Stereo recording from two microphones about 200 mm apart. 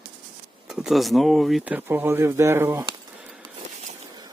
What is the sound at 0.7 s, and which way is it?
Speech, centre (ahead or behind).